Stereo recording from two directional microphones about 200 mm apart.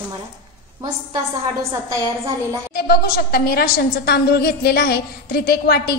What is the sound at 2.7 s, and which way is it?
A woman's voice, 50° left (ahead or behind).